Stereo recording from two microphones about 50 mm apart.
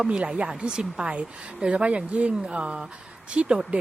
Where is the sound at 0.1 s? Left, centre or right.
Right.